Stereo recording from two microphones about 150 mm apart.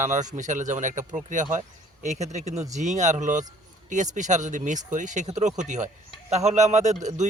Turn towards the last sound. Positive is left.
turn(degrees=-50)  # may be behind; listen again after turning